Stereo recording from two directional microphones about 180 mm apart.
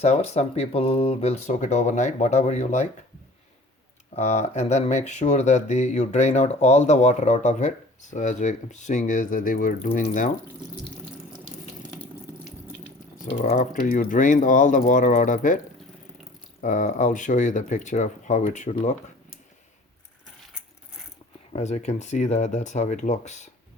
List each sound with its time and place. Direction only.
0.0 s speech: 35° left (ahead or behind)
4.1 s speech: 40° left (ahead or behind)
13.2 s speech: 35° left (ahead or behind)
21.5 s speech: 40° left (ahead or behind)